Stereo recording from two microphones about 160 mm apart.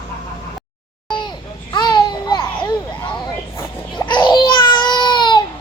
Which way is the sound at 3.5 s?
25° left (ahead or behind).